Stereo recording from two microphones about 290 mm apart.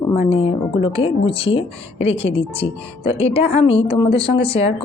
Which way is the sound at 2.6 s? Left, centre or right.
Centre.